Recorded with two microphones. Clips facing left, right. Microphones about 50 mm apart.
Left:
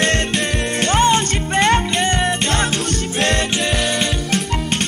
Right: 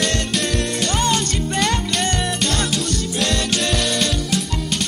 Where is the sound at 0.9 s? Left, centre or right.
Left.